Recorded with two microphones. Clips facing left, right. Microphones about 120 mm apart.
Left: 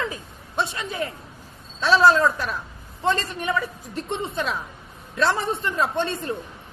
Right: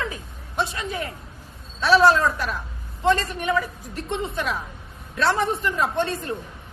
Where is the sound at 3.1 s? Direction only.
30° left (ahead or behind).